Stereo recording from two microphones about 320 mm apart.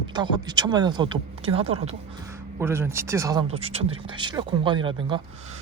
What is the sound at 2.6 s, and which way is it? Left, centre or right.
Speech, centre.